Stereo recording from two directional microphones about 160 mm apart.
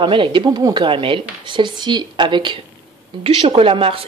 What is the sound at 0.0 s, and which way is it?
A woman's voice, 30° right (ahead or behind).